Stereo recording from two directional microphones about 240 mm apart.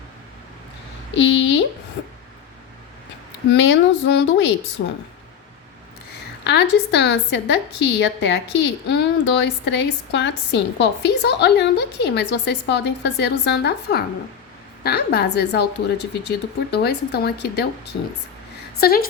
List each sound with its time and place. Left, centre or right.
1.1 s a woman's voice: left
3.5 s a woman's voice: left
6.4 s a woman's voice: left